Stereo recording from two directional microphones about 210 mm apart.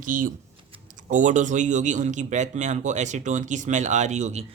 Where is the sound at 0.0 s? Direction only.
40° right (ahead or behind).